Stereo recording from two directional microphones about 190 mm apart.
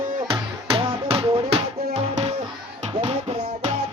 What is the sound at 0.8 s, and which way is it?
Music, 30° right (ahead or behind).